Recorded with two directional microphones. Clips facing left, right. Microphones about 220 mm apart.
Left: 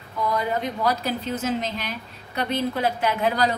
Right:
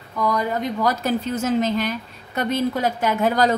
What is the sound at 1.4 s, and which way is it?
A woman's voice, 45° right (ahead or behind).